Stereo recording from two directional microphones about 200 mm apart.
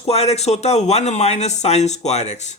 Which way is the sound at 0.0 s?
30° left (ahead or behind).